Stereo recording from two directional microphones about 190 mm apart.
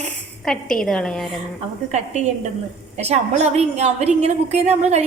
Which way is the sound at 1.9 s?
40° right (ahead or behind).